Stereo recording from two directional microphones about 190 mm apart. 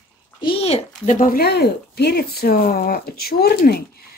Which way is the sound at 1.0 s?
45° left (ahead or behind).